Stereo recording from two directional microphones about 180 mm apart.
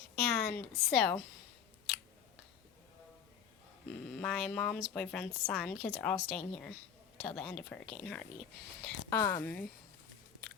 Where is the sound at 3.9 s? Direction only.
5° left (ahead or behind).